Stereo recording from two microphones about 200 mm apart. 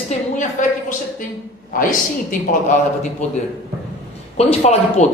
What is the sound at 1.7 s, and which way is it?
Speech, 45° left (ahead or behind).